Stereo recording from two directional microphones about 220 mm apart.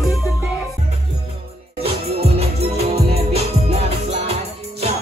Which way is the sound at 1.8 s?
25° right (ahead or behind).